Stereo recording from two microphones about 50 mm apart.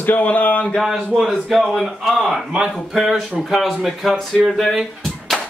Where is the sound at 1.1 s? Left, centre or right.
Centre.